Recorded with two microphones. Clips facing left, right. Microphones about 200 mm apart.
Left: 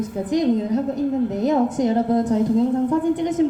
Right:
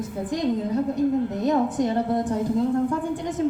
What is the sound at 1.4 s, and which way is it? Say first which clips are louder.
A woman's voice: left 4 dB; 20° left (ahead or behind).